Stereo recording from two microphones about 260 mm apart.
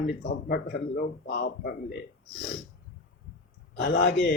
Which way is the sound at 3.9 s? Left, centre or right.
Left.